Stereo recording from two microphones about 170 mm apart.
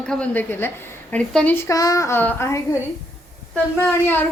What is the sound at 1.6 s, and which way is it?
Child singing, 20° left (ahead or behind).